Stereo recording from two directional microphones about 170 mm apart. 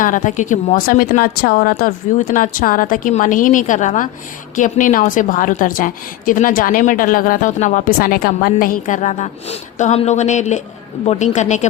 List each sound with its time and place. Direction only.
0.0 s a woman's voice: 50° left (ahead or behind)